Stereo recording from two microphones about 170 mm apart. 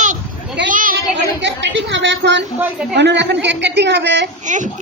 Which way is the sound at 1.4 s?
90° right.